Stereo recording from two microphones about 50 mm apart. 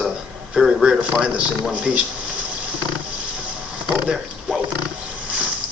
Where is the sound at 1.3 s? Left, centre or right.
Right.